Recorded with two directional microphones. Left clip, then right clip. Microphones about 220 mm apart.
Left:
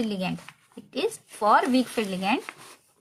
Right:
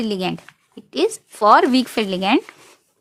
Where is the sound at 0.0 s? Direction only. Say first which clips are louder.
Right 7 dB; 50° right (ahead or behind).